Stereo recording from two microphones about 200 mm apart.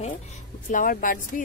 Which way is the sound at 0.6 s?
40° left (ahead or behind).